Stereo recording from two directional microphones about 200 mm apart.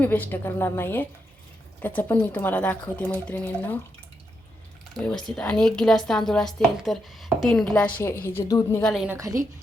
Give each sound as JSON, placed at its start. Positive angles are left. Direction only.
{"t": 0.0, "sound": "speech", "side_deg": 10}
{"t": 5.2, "sound": "a woman's voice", "side_deg": 5}
{"t": 8.8, "sound": "a woman's voice", "side_deg": 0}
{"t": 9.0, "sound": "a woman's voice", "side_deg": -15}